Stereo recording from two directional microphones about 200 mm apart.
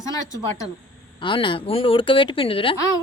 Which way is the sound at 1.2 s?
25° left (ahead or behind).